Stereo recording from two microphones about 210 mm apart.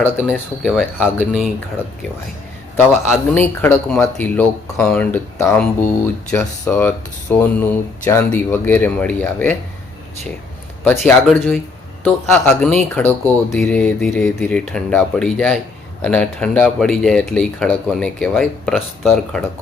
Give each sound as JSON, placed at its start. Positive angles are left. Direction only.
{"t": 0.0, "sound": "speech", "side_deg": 5}
{"t": 3.1, "sound": "speech", "side_deg": 10}
{"t": 10.8, "sound": "speech", "side_deg": 0}